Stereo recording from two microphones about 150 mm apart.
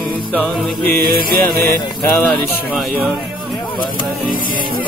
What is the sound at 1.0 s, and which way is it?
Music, 75° right (ahead or behind).